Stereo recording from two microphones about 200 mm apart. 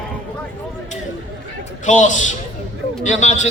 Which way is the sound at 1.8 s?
40° left (ahead or behind).